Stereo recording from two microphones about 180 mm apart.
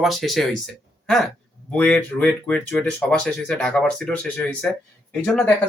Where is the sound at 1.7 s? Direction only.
5° left (ahead or behind).